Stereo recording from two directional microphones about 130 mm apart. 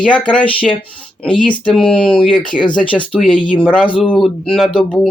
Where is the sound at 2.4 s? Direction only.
40° left (ahead or behind).